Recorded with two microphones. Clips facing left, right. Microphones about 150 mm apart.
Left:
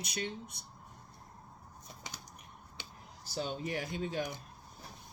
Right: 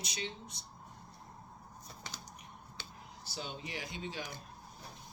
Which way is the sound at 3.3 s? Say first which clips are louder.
Left 7 dB; 45° left (ahead or behind).